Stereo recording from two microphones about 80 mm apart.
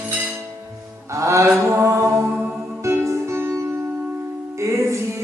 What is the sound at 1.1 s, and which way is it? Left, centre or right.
Mantra, right.